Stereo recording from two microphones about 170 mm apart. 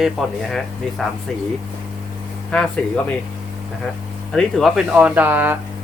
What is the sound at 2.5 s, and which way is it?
Speech, 5° left (ahead or behind).